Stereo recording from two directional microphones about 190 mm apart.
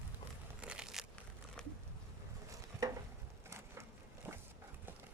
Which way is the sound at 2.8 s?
20° right (ahead or behind).